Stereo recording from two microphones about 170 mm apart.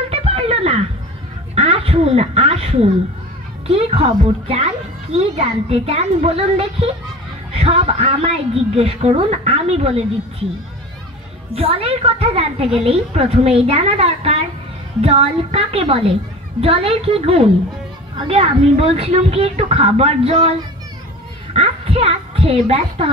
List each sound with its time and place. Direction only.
0.1 s a sound: 35° right (ahead or behind)
3.6 s a woman's voice: 35° right (ahead or behind)
11.5 s a woman's voice: 35° right (ahead or behind)
21.5 s a child's voice: 35° right (ahead or behind)